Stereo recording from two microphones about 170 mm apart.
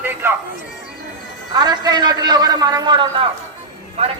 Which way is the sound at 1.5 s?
25° right (ahead or behind).